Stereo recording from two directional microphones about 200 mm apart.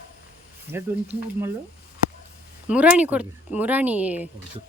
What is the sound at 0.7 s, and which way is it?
Speech, 10° right (ahead or behind).